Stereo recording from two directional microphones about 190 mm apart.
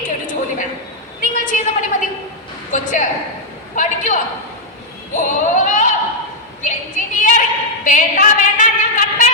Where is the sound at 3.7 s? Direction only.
40° left (ahead or behind).